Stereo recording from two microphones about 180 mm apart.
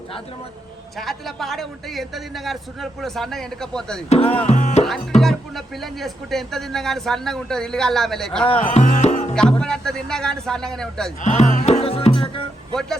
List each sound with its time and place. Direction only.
0.9 s speech: centre (ahead or behind)
4.4 s music: 40° left (ahead or behind)
5.2 s speech: centre (ahead or behind)
8.7 s music: 40° left (ahead or behind)
9.3 s speech: 5° left (ahead or behind)
11.2 s music: 40° left (ahead or behind)